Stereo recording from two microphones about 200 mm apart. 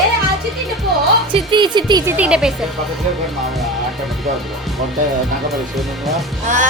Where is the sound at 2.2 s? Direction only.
5° right (ahead or behind).